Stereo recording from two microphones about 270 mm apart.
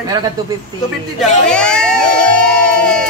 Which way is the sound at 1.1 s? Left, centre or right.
Centre.